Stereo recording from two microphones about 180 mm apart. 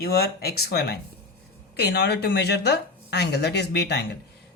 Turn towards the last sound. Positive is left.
turn(degrees=70)  # may be behind; listen again after turning